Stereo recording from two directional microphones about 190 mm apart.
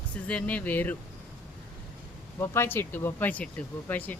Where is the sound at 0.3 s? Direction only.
5° left (ahead or behind).